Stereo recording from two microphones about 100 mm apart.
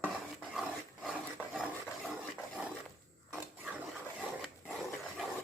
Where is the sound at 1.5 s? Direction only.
Centre (ahead or behind).